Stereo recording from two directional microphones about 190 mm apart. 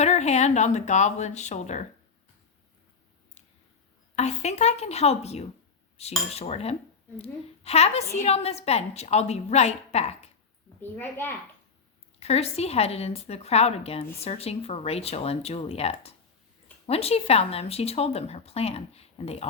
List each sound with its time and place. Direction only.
0.0 s speech: 35° left (ahead or behind)
4.1 s speech: 35° left (ahead or behind)
10.8 s a woman's voice: 10° left (ahead or behind)
12.2 s speech: 35° left (ahead or behind)